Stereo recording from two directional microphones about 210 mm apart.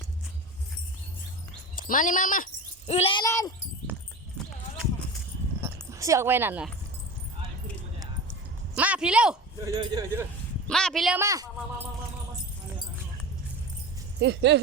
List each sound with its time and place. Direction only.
1.7 s speech: 40° left (ahead or behind); by 3.5 s 15° left (ahead or behind)
5.6 s speech: 15° right (ahead or behind)
8.7 s a sound: 5° right (ahead or behind)
9.6 s speech: 20° right (ahead or behind)
10.7 s speech: 5° left (ahead or behind)
11.2 s speech: 15° right (ahead or behind)
14.2 s speech: 55° right (ahead or behind)